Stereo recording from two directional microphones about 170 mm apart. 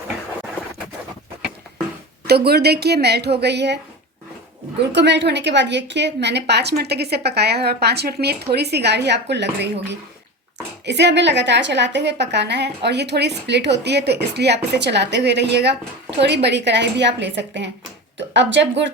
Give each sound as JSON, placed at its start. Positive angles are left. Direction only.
{"t": 2.2, "sound": "a woman's voice", "side_deg": -70}
{"t": 4.8, "sound": "a woman's voice", "side_deg": -90}
{"t": 10.8, "sound": "a woman's voice", "side_deg": -90}